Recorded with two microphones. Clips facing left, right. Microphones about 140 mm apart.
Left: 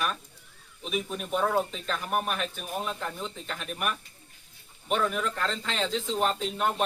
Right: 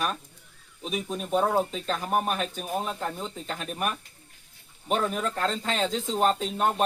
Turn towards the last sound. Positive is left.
turn(degrees=-40)  # may be behind; listen again after turning